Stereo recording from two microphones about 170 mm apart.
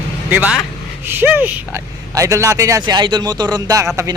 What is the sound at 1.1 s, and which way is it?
Speech, 10° right (ahead or behind).